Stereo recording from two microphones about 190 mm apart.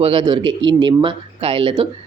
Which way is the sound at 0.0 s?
25° right (ahead or behind).